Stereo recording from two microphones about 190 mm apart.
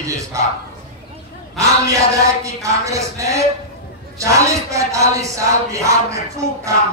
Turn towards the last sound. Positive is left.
turn(degrees=-15)  # may be behind; listen again after turning